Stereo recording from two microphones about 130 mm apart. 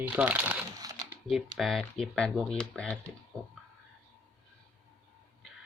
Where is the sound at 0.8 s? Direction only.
30° right (ahead or behind).